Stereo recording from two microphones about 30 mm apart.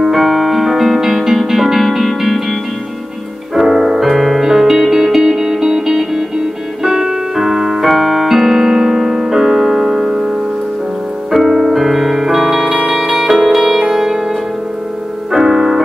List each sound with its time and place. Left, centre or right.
0.0 s music: centre
3.5 s music: centre
11.4 s piano: centre
11.7 s music: centre
15.3 s music: centre